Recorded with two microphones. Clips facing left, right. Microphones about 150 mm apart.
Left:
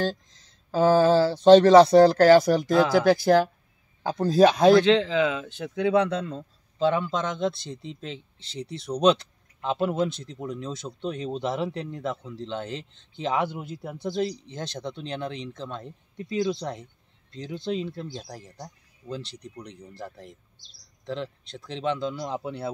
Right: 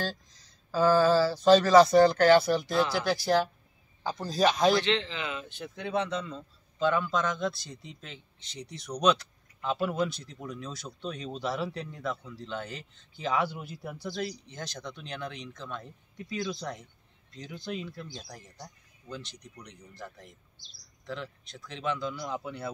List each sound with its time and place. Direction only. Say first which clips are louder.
0.7 s speech: left 4 dB; 20° left (ahead or behind); by 4.7 s 55° left (ahead or behind)
5.6 s speech: left 9 dB; 75° left (ahead or behind)
6.8 s a man's voice: left 3 dB; 25° left (ahead or behind)